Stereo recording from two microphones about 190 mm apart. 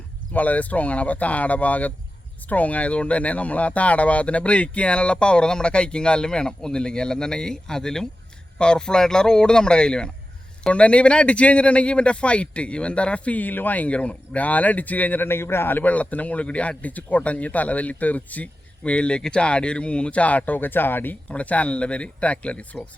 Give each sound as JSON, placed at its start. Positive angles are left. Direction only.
{"t": 0.3, "sound": "speech", "side_deg": 10}